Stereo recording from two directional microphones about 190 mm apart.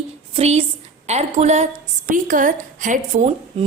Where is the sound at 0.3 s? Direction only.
35° right (ahead or behind).